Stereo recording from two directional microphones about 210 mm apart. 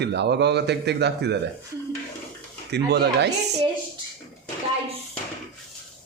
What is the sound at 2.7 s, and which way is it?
Speech, 50° right (ahead or behind).